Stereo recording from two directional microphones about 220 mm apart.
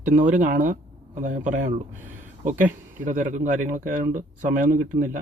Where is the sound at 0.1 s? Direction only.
35° right (ahead or behind).